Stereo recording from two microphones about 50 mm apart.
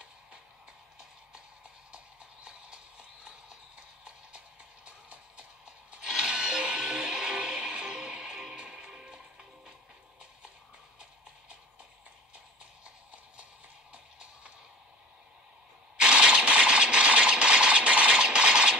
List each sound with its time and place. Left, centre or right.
3.3 s clip-clop: centre
4.8 s music: right
12.8 s music: right
16.0 s a sound: centre